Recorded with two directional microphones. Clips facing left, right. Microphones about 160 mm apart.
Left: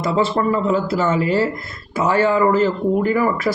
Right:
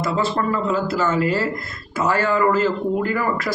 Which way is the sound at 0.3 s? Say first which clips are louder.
Left 3 dB; 20° left (ahead or behind).